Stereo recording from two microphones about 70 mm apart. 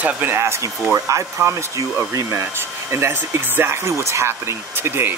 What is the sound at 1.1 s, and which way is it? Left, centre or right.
Speech, right.